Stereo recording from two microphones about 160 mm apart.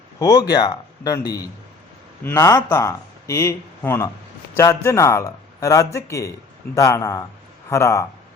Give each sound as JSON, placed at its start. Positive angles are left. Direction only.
{"t": 0.2, "sound": "speech", "side_deg": 20}